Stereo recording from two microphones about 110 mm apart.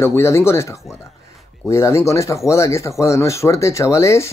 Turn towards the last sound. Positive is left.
turn(degrees=25)  # may be behind; listen again after turning